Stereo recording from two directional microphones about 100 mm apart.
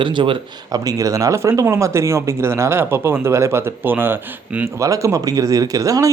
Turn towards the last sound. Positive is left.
turn(degrees=-35)  # may be behind; listen again after turning